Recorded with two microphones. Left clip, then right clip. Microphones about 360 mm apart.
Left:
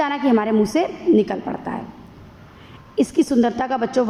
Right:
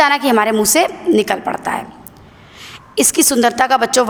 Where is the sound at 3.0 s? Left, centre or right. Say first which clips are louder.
Right 4 dB; right.